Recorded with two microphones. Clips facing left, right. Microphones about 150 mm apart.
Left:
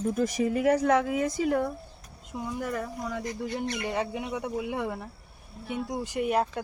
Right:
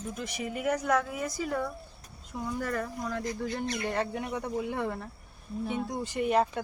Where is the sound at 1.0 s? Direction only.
70° left (ahead or behind).